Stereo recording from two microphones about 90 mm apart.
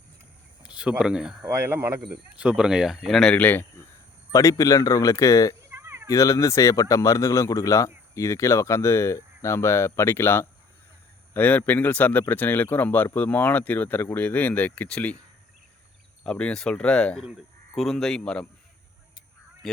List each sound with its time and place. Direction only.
0.6 s speech: 10° right (ahead or behind)
1.5 s speech: 30° right (ahead or behind)
2.0 s speech: 10° right (ahead or behind); by 3.3 s 5° left (ahead or behind)
3.3 s speech: 20° left (ahead or behind)
4.3 s speech: 40° left (ahead or behind)
5.7 s cat: 30° right (ahead or behind)
6.1 s speech: 35° left (ahead or behind); by 15.2 s 10° left (ahead or behind)
16.2 s speech: 10° left (ahead or behind)
19.6 s speech: 5° left (ahead or behind)